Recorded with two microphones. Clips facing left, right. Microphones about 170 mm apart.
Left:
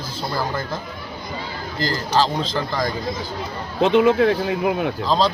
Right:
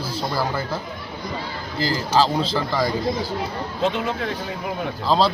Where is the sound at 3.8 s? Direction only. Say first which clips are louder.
Left 9 dB; 75° left (ahead or behind).